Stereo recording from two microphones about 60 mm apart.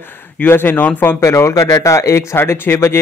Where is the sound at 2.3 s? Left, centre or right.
Left.